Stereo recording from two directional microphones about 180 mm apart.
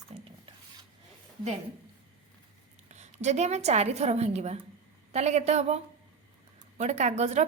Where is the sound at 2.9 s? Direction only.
40° right (ahead or behind).